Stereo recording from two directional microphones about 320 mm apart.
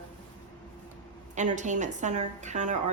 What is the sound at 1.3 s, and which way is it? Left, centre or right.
A woman's voice, right.